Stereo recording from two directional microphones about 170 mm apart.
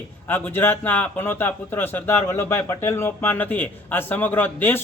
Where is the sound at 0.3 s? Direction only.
10° left (ahead or behind).